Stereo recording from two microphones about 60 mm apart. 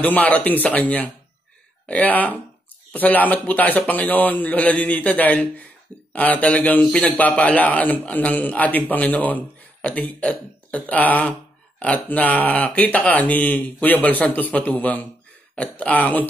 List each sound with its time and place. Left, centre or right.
0.0 s speech: left